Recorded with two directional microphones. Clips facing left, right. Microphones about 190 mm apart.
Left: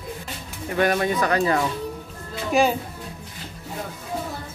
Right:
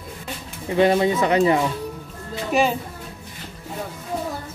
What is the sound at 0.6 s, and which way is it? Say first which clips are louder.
Speech: right 4 dB; 20° right (ahead or behind).